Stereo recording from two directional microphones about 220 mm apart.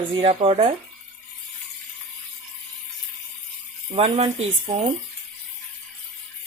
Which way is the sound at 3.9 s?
25° right (ahead or behind).